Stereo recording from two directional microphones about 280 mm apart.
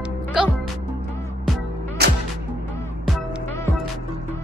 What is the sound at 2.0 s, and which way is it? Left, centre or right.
Music, right.